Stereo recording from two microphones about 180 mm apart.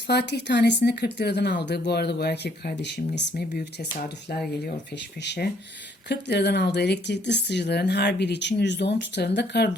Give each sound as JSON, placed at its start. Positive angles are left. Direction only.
{"t": 0.1, "sound": "speech", "side_deg": 70}
{"t": 5.2, "sound": "speech", "side_deg": 70}